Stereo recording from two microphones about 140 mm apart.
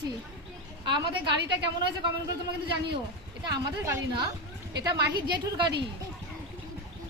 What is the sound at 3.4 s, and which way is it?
A woman's voice, 25° right (ahead or behind).